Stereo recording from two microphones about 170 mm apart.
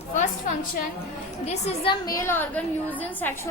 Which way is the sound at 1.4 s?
35° left (ahead or behind).